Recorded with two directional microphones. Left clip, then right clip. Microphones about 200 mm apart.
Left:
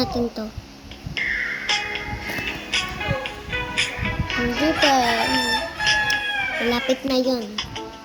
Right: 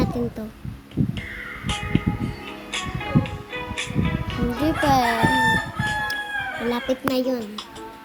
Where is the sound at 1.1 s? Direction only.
Centre (ahead or behind).